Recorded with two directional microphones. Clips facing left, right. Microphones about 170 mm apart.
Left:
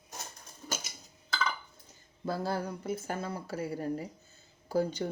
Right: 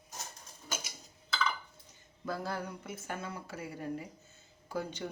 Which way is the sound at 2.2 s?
30° left (ahead or behind).